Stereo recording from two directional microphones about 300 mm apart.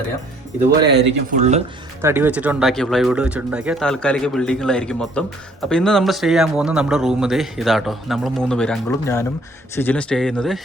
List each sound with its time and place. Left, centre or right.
0.9 s speech: right
2.0 s a man's voice: centre